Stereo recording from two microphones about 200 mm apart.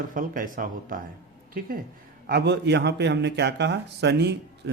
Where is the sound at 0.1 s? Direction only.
45° right (ahead or behind).